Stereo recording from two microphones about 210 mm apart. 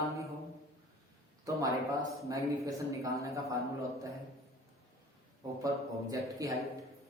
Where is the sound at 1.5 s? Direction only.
15° right (ahead or behind).